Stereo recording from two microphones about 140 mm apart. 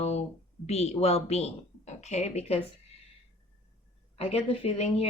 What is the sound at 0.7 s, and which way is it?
Speech, 50° left (ahead or behind).